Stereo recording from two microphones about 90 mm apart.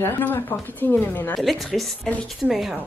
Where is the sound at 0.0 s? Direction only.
25° left (ahead or behind).